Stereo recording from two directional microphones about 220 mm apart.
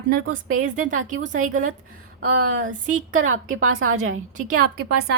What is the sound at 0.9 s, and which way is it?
Speech, 35° right (ahead or behind).